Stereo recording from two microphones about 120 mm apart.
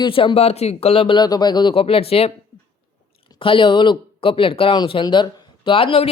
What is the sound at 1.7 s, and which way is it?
Speech, 50° left (ahead or behind).